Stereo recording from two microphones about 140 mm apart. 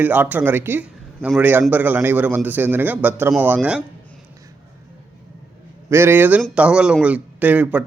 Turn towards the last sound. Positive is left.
turn(degrees=-10)  # may be behind; listen again after turning